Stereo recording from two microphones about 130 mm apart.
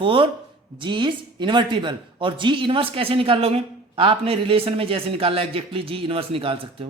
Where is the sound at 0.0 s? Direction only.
45° right (ahead or behind).